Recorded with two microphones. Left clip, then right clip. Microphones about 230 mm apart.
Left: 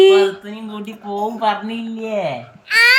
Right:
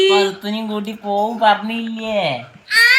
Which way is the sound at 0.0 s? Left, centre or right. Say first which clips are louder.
Left 3 dB; centre.